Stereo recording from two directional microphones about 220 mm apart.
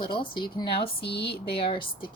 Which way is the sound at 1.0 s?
50° left (ahead or behind).